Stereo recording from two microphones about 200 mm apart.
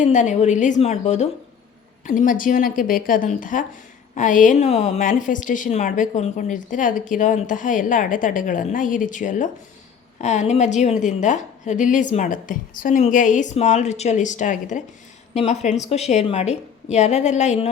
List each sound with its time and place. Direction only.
0.0 s a woman's voice: 35° left (ahead or behind)